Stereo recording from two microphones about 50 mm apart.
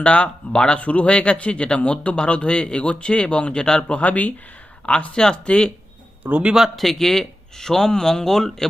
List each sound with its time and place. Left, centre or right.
0.0 s speech: left
6.2 s a man's voice: right
6.7 s speech: centre